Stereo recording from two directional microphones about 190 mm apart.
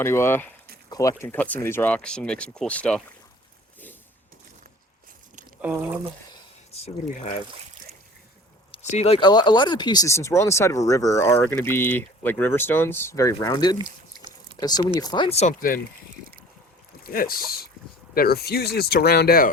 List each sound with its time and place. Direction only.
0.0 s speech: 15° left (ahead or behind)
5.6 s speech: 10° right (ahead or behind)
6.3 s a sound: 35° left (ahead or behind)
8.7 s speech: 35° left (ahead or behind)
13.7 s a sound: 25° right (ahead or behind)
14.6 s speech: 20° left (ahead or behind)
17.0 s speech: 50° left (ahead or behind)